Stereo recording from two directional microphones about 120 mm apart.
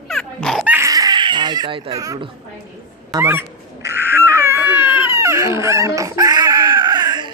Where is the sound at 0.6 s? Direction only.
15° right (ahead or behind).